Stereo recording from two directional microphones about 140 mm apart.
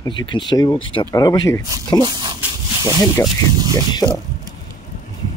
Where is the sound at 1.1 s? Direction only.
25° left (ahead or behind).